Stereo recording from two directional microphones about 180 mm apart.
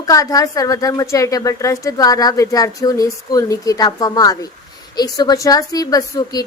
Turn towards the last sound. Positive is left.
turn(degrees=20)  # may be behind; listen again after turning